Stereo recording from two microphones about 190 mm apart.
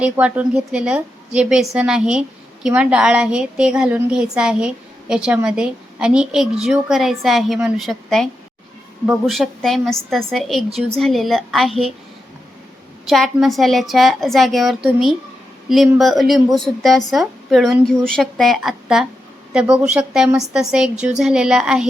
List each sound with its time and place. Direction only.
0.0 s a woman's voice: 5° right (ahead or behind)
13.1 s a woman's voice: centre (ahead or behind)
16.0 s a woman's voice: centre (ahead or behind)
20.9 s speech: 40° right (ahead or behind)
21.2 s a woman's voice: 5° right (ahead or behind)